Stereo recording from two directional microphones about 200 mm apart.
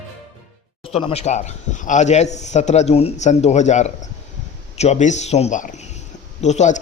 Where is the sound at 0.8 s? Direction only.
30° left (ahead or behind).